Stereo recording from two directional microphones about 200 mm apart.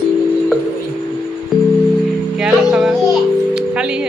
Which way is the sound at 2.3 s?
5° right (ahead or behind).